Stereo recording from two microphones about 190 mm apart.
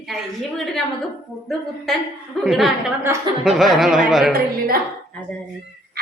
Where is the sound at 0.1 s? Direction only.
Centre (ahead or behind).